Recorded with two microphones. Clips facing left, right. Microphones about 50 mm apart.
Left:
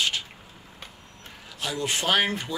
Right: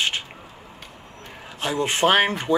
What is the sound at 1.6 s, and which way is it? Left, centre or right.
Speech, right.